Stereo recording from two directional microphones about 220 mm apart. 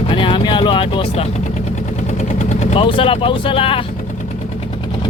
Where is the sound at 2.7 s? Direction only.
25° left (ahead or behind).